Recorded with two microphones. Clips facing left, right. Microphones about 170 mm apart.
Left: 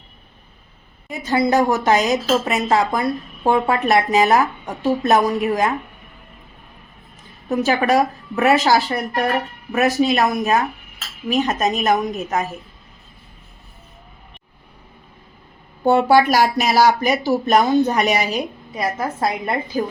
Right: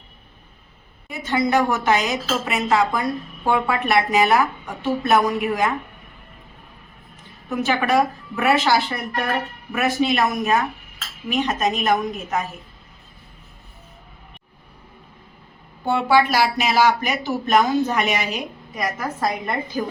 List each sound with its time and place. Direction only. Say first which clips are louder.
1.2 s a woman's voice: left 3 dB; 35° left (ahead or behind)
7.5 s a woman's voice: left 3 dB; 40° left (ahead or behind)
15.8 s a woman's voice: left 4 dB; 45° left (ahead or behind); by 19.3 s 30° left (ahead or behind)